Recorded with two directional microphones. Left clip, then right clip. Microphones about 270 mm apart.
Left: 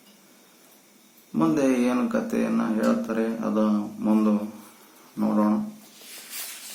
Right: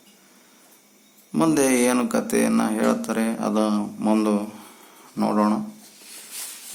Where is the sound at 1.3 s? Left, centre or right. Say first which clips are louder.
Right 3 dB; right.